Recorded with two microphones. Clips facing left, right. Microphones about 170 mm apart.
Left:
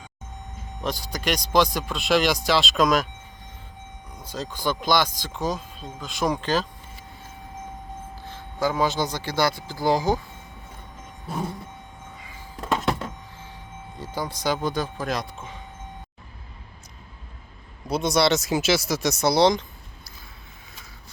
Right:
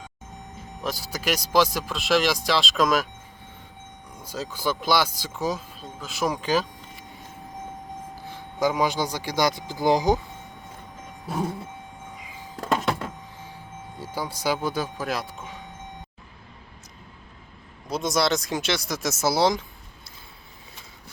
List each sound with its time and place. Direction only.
0.8 s speech: 5° right (ahead or behind)
4.2 s speech: 10° right (ahead or behind)
8.1 s speech: 10° right (ahead or behind)
12.1 s music: 15° right (ahead or behind)
14.0 s speech: 10° right (ahead or behind)
17.8 s speech: centre (ahead or behind)